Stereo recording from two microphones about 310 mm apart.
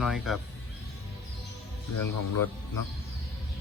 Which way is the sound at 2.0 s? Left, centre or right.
Left.